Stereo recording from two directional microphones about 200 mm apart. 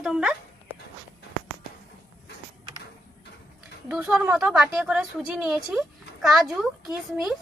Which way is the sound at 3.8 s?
5° right (ahead or behind).